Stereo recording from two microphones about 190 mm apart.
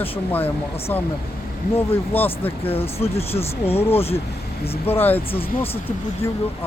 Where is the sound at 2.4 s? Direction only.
30° left (ahead or behind).